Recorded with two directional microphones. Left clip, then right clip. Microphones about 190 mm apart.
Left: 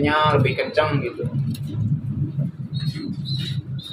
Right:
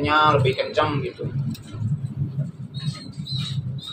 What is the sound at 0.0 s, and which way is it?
Speech, 15° left (ahead or behind).